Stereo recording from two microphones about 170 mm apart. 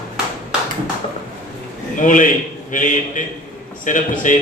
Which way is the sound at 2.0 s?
50° left (ahead or behind).